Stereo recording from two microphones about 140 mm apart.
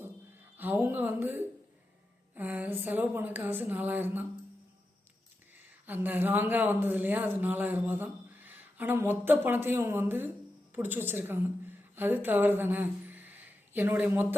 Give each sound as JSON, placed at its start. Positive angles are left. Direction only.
{"t": 0.5, "sound": "speech", "side_deg": -15}
{"t": 5.8, "sound": "speech", "side_deg": -15}